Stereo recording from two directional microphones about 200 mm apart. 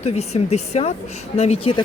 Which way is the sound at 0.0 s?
30° left (ahead or behind).